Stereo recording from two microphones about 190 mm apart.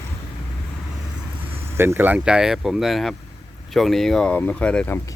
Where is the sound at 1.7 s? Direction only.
10° right (ahead or behind).